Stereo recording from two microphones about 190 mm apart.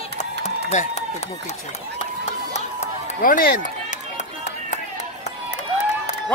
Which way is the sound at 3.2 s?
50° left (ahead or behind).